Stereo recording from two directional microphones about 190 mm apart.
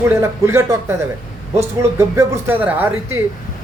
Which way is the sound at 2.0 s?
15° right (ahead or behind).